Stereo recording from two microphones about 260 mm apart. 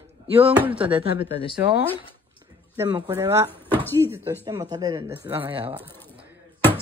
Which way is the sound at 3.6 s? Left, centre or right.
Centre.